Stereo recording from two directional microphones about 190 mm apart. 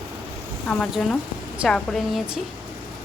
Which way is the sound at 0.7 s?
5° left (ahead or behind).